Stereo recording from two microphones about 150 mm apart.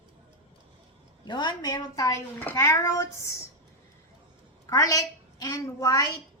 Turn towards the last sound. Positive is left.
turn(degrees=25)  # may be behind; listen again after turning